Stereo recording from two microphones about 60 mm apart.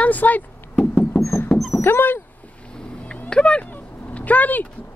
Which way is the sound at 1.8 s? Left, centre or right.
Left.